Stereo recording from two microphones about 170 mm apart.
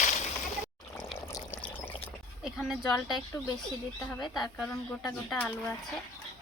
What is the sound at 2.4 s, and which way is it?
Stir, centre (ahead or behind).